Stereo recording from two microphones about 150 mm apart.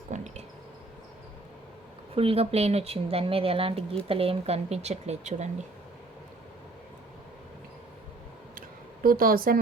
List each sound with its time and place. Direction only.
0.1 s a sound: 55° right (ahead or behind)
2.1 s speech: 40° right (ahead or behind)
9.0 s a woman's voice: 75° right (ahead or behind)